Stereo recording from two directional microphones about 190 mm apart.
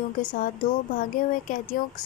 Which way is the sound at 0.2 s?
45° left (ahead or behind).